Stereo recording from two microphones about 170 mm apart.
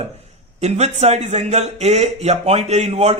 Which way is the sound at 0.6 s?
40° right (ahead or behind).